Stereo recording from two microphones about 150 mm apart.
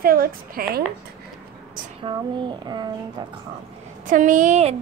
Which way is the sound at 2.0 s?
30° right (ahead or behind).